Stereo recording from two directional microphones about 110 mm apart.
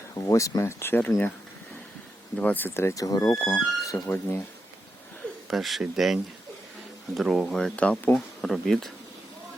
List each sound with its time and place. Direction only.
0.3 s speech: 30° left (ahead or behind)
2.4 s speech: 15° left (ahead or behind)
5.5 s speech: centre (ahead or behind)